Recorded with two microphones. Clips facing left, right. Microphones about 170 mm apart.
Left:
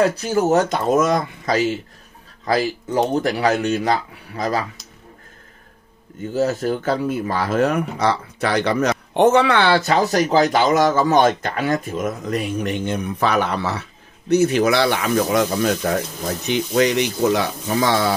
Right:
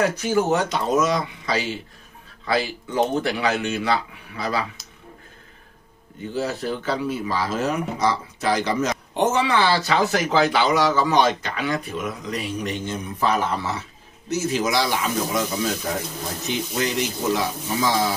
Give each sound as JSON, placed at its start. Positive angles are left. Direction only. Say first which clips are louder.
{"t": 0.1, "sound": "speech", "louder": "left 3 dB", "side_deg": 35}
{"t": 6.3, "sound": "speech", "louder": "left 6 dB", "side_deg": 45}